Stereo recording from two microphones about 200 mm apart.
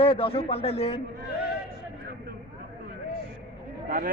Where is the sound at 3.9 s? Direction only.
45° right (ahead or behind).